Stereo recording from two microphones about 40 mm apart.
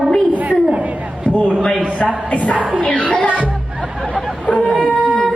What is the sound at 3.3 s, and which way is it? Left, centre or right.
Music, right.